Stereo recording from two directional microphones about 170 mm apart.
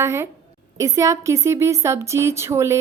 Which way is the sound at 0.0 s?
15° right (ahead or behind).